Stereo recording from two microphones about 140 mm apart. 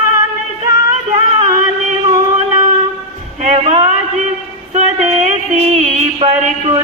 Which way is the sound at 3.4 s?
55° right (ahead or behind).